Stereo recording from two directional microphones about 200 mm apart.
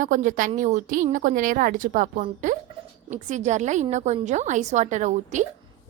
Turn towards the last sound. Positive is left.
turn(degrees=-35)  # may be behind; listen again after turning